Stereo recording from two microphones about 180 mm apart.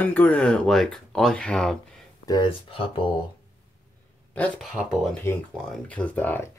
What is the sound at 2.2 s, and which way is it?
Speech, 25° left (ahead or behind).